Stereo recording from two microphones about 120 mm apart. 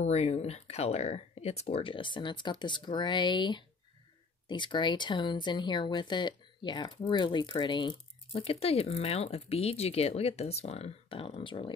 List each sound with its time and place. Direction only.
0.0 s speech: 65° left (ahead or behind); by 8.0 s 40° left (ahead or behind)
8.3 s speech: 60° left (ahead or behind)